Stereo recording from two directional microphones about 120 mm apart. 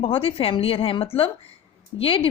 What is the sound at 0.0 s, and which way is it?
Speech, 50° left (ahead or behind).